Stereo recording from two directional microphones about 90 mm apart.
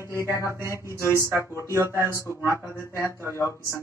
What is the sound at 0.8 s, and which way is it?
Speech, 30° right (ahead or behind).